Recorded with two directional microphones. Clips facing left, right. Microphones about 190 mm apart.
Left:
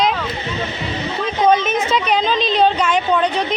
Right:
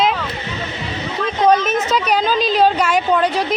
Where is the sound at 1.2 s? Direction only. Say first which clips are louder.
Right 1 dB; centre (ahead or behind).